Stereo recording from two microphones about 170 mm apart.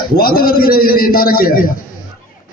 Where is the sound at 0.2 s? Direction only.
60° left (ahead or behind).